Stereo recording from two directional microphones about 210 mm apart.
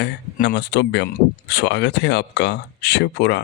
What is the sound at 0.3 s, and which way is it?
Speech, 55° left (ahead or behind).